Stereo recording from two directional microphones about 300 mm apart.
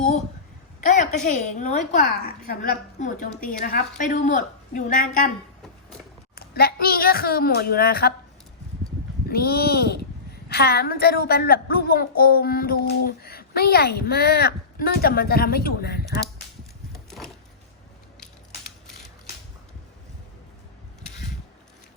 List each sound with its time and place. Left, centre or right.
0.8 s a woman's voice: left
6.3 s a woman's voice: left
9.3 s a woman's voice: left
16.9 s a sound: centre